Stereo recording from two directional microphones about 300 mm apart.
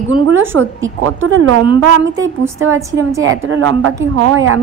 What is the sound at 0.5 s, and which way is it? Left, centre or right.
A woman's voice, right.